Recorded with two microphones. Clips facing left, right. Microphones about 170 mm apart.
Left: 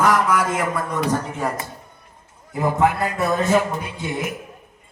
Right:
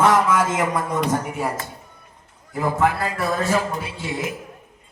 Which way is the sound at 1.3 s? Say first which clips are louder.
Even; 10° right (ahead or behind).